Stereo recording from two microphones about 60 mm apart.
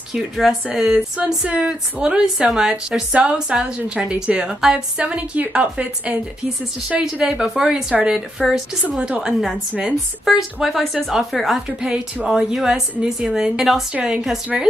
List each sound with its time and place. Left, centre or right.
0.1 s a woman's voice: centre
1.1 s a woman's voice: centre
5.0 s a woman's voice: right